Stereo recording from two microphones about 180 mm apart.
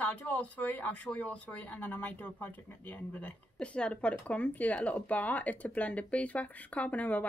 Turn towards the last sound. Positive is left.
turn(degrees=10)  # may be behind; listen again after turning